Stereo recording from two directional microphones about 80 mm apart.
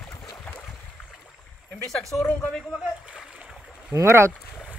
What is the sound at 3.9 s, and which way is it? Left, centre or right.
Speech, right.